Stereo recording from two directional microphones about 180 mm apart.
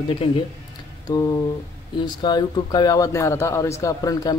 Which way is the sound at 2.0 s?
25° left (ahead or behind).